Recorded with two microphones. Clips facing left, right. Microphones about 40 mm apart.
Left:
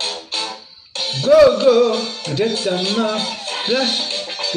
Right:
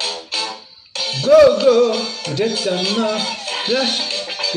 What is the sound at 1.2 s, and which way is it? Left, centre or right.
Speech, centre.